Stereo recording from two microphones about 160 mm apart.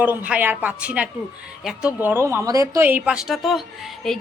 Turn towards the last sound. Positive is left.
turn(degrees=0)  # may be behind; listen again after turning